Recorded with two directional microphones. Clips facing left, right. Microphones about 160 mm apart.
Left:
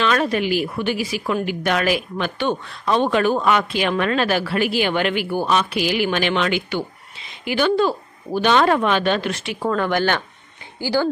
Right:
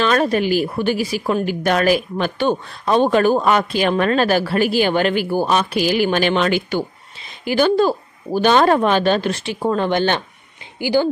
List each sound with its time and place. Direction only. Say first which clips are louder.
0.0 s a woman's voice: right 3 dB; 40° right (ahead or behind)
9.6 s speech: right 2 dB; 20° right (ahead or behind)